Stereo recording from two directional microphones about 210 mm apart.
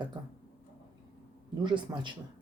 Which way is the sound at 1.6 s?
20° right (ahead or behind).